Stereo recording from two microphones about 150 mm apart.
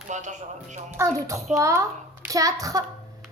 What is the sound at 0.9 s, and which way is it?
A child's voice, 20° right (ahead or behind).